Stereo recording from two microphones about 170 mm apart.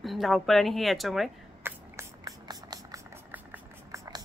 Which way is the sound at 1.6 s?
20° right (ahead or behind).